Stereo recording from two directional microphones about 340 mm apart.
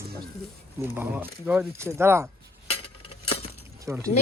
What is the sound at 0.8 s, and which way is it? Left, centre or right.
Speech, centre.